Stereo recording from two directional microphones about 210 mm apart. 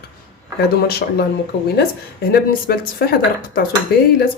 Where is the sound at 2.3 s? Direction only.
45° left (ahead or behind).